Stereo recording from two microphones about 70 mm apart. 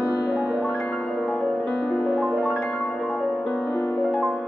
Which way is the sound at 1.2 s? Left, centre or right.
Centre.